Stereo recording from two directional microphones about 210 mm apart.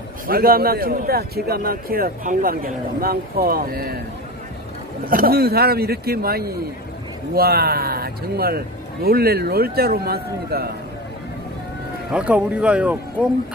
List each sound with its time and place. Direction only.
0.3 s a man's voice: 45° right (ahead or behind)
5.0 s a man's voice: 45° right (ahead or behind)
12.1 s speech: 5° right (ahead or behind)